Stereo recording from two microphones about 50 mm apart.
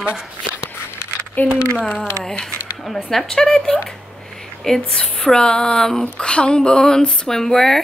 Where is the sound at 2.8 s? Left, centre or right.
Centre.